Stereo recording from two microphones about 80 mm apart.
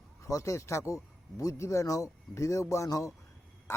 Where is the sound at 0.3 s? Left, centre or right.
Left.